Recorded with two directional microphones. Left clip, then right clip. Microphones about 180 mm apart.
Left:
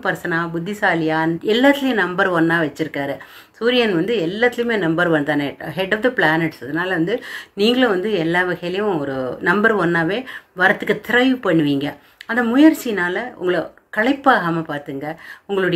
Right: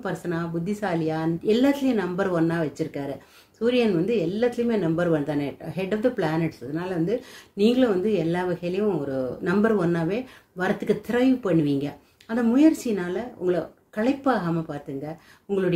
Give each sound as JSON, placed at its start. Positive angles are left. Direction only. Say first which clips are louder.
{"t": 0.0, "sound": "a woman's voice", "louder": "left 9 dB", "side_deg": -20}